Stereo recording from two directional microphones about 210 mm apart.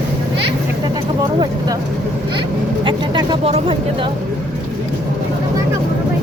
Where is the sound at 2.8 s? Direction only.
20° right (ahead or behind).